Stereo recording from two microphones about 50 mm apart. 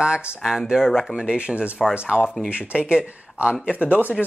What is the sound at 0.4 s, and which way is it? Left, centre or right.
Speech, centre.